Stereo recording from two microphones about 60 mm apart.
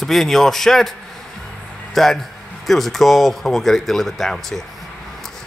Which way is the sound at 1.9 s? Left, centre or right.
Centre.